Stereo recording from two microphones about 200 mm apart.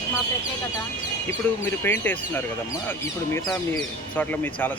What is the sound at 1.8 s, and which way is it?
Speech, 10° left (ahead or behind).